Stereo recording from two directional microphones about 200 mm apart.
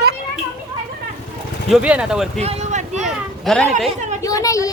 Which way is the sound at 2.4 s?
30° right (ahead or behind).